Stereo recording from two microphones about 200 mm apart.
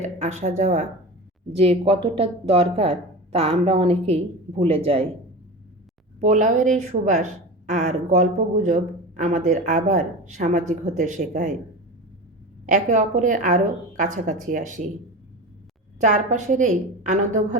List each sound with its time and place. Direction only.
0.0 s a woman's voice: 35° right (ahead or behind)
6.1 s a woman's voice: 35° right (ahead or behind)
12.6 s a woman's voice: 40° right (ahead or behind)
16.0 s a woman's voice: 35° right (ahead or behind)